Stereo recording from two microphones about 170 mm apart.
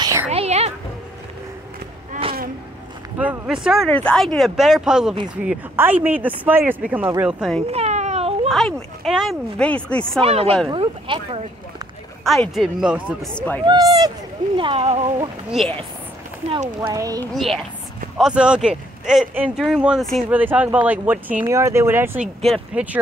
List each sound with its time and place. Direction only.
0.0 s a sound: 20° right (ahead or behind)
0.3 s a sound: 40° right (ahead or behind)
3.2 s speech: 5° right (ahead or behind)
7.7 s a sound: 40° right (ahead or behind)
8.5 s speech: centre (ahead or behind)
10.2 s speech: 35° right (ahead or behind)
12.3 s speech: centre (ahead or behind)
13.3 s speech: 5° left (ahead or behind)
13.7 s speech: 25° right (ahead or behind)
14.6 s speech: 35° right (ahead or behind)
16.4 s speech: 45° right (ahead or behind)
16.8 s speech: 20° right (ahead or behind)
17.3 s speech: centre (ahead or behind)